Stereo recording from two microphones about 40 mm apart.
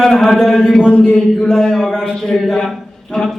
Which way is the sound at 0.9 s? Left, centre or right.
Left.